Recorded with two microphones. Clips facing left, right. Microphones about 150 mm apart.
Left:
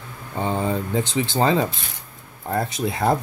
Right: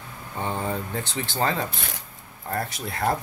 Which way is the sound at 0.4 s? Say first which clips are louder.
Left 5 dB; 20° left (ahead or behind).